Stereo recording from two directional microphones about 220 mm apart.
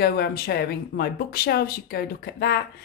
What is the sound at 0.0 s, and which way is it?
A woman's voice, 45° left (ahead or behind).